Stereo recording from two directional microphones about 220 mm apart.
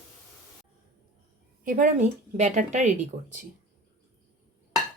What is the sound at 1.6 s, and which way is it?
A woman's voice, 35° right (ahead or behind).